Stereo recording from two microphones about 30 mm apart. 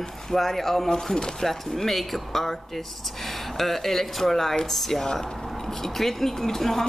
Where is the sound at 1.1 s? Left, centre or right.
Left.